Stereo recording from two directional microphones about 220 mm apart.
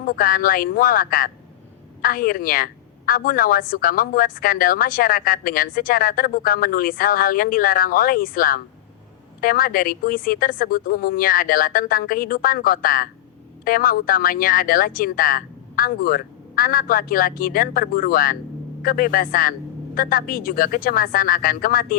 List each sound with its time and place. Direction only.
0.0 s a woman's voice: 40° left (ahead or behind)